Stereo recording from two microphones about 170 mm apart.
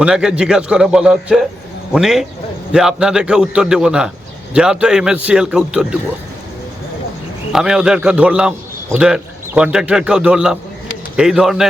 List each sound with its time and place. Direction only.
0.0 s a man's voice: 5° right (ahead or behind)
7.5 s a man's voice: 5° right (ahead or behind)